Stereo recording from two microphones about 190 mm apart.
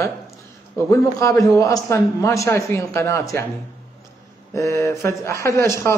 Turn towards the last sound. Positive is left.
turn(degrees=15)  # may be behind; listen again after turning